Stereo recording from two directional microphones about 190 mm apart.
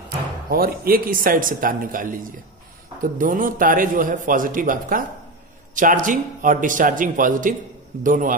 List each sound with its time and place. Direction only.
0.5 s a man's voice: 50° right (ahead or behind)